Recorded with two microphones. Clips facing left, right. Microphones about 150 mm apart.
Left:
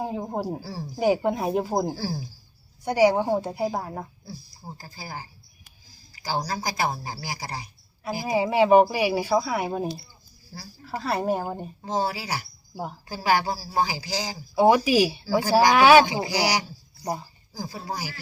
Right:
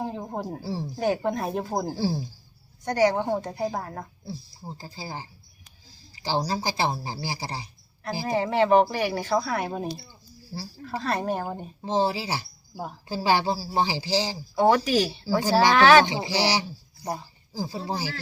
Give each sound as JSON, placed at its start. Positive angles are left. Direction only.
{"t": 0.0, "sound": "a sound", "side_deg": 10}
{"t": 0.6, "sound": "speech", "side_deg": -25}
{"t": 0.9, "sound": "a woman's voice", "side_deg": 10}
{"t": 2.0, "sound": "speech", "side_deg": -25}
{"t": 2.8, "sound": "a woman's voice", "side_deg": 10}
{"t": 4.3, "sound": "speech", "side_deg": -25}
{"t": 8.3, "sound": "a woman's voice", "side_deg": 10}
{"t": 11.8, "sound": "speech", "side_deg": -25}
{"t": 14.5, "sound": "a woman's voice", "side_deg": 10}
{"t": 16.2, "sound": "speech", "side_deg": -30}
{"t": 17.0, "sound": "speech", "side_deg": 5}
{"t": 17.5, "sound": "speech", "side_deg": -30}